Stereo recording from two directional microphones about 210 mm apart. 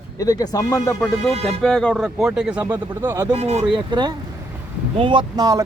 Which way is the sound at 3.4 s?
30° right (ahead or behind).